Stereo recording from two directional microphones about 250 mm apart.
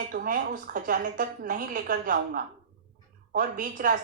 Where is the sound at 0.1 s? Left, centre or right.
Right.